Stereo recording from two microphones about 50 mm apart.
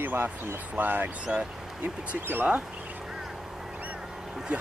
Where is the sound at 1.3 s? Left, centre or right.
Right.